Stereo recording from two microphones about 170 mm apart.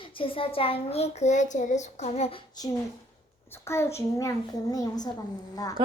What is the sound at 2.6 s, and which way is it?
A woman's voice, 25° left (ahead or behind).